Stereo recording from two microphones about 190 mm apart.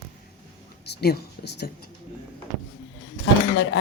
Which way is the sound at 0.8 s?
60° left (ahead or behind).